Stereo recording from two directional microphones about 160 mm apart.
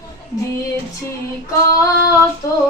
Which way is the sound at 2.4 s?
20° left (ahead or behind).